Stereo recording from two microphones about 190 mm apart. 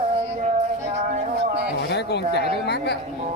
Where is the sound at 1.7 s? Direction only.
65° left (ahead or behind).